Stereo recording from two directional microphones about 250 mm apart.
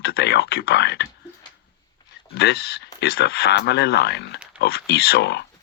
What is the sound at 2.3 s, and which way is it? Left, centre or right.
Speech, left.